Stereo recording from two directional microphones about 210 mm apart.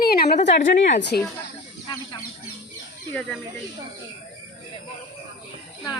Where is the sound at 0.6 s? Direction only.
35° left (ahead or behind).